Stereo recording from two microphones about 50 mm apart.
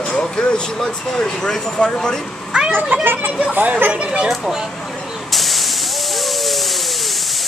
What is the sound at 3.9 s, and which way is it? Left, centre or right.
Speech, right.